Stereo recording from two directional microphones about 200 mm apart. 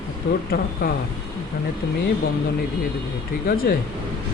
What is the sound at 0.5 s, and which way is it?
Speech, 50° left (ahead or behind).